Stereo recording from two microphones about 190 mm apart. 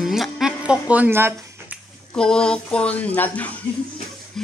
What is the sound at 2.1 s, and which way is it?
Speech, 5° left (ahead or behind).